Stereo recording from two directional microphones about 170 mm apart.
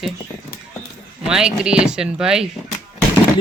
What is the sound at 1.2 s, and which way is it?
Speech, 5° right (ahead or behind).